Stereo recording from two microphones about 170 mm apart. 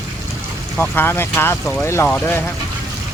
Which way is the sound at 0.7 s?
10° left (ahead or behind).